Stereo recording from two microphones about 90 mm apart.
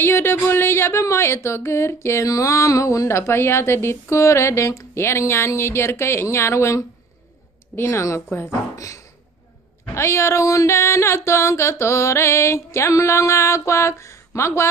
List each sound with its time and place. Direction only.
0.0 s speech: 25° left (ahead or behind)